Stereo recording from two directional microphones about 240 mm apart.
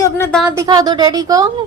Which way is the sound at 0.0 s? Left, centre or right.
Centre.